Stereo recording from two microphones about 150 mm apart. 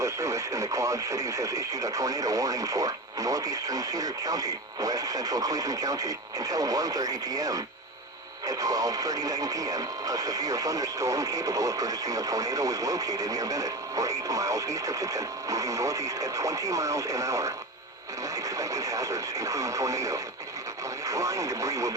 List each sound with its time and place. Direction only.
0.0 s speech: 20° right (ahead or behind)